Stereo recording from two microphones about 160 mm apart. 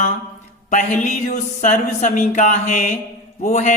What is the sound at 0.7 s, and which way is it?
Speech, 50° left (ahead or behind).